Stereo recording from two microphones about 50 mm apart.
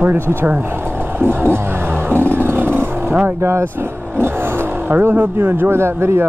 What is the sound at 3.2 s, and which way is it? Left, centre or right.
Speech, right.